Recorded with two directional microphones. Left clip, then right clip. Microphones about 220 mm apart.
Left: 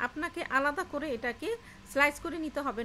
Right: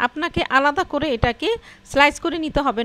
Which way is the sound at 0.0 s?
40° right (ahead or behind).